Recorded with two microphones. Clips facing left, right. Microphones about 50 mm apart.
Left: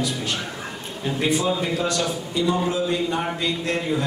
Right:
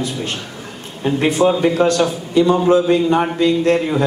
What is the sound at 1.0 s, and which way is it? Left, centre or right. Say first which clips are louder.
A man's voice: right 8 dB; right.